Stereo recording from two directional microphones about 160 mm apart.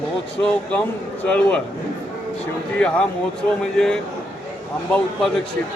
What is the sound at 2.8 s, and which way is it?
Speech, 5° left (ahead or behind).